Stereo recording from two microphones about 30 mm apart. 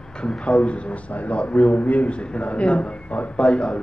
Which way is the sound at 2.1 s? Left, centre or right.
Left.